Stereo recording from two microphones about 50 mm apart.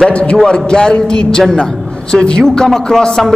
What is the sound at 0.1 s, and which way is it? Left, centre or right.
A man's voice, left.